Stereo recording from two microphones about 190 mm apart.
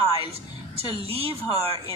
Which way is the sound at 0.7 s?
30° right (ahead or behind).